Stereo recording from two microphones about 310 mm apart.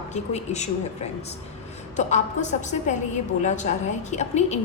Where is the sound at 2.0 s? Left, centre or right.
Left.